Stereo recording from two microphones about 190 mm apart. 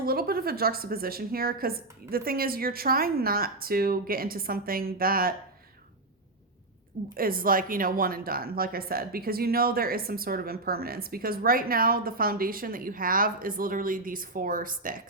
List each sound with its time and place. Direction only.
0.0 s speech: 50° right (ahead or behind)
7.2 s speech: 50° right (ahead or behind)